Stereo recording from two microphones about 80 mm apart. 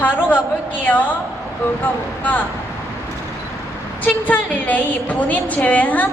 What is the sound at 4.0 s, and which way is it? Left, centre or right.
A woman's voice, centre.